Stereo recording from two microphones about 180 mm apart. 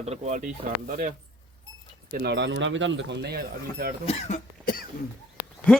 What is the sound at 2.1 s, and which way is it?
Speech, 70° right (ahead or behind).